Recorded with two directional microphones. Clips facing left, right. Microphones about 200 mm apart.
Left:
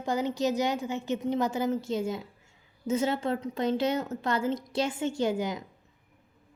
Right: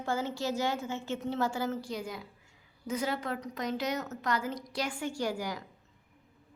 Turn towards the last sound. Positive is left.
turn(degrees=20)  # may be behind; listen again after turning